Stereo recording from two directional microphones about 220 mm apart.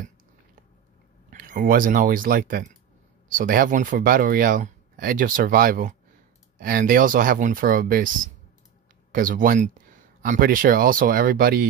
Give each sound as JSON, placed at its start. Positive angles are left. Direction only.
{"t": 1.3, "sound": "speech", "side_deg": -35}